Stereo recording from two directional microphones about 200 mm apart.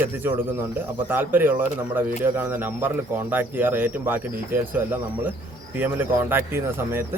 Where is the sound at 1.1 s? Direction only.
10° right (ahead or behind).